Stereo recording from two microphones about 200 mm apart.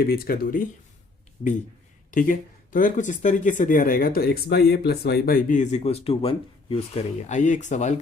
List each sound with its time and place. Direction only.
0.0 s speech: 50° left (ahead or behind)
2.0 s speech: 40° left (ahead or behind)